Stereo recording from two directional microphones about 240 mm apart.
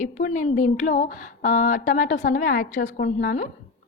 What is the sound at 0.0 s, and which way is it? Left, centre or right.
A woman's voice, left.